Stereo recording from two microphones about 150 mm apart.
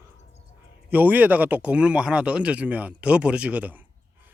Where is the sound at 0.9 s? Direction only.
10° right (ahead or behind).